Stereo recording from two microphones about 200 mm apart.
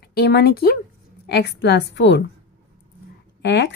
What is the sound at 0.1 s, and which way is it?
A woman's voice, 50° left (ahead or behind).